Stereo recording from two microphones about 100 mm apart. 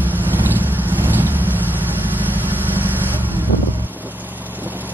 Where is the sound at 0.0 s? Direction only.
20° right (ahead or behind).